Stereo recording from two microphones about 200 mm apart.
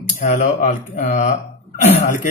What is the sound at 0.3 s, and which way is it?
Speech, 40° left (ahead or behind).